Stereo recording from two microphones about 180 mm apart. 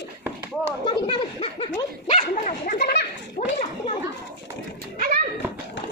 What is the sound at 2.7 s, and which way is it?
Speech, 65° left (ahead or behind).